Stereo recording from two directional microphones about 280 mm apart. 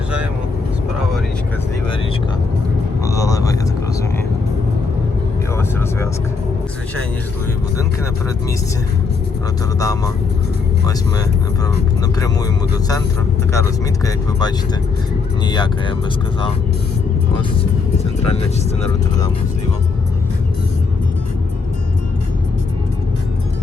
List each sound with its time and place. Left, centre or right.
3.0 s vehicle: centre
9.8 s speech: centre
12.2 s vehicle: centre
13.5 s speech: centre
17.6 s vehicle: left